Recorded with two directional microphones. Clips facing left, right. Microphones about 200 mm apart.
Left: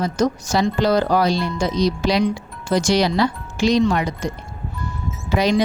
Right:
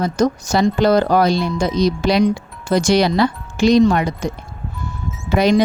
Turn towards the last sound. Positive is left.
turn(degrees=-55)  # may be behind; listen again after turning